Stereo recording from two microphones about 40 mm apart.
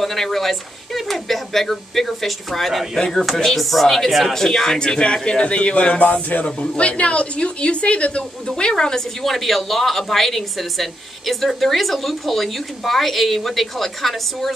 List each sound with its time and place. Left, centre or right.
0.0 s a woman's voice: centre
9.2 s speech: centre